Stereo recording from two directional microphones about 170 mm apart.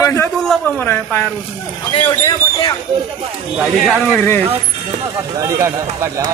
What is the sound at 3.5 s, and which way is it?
Speech, centre (ahead or behind).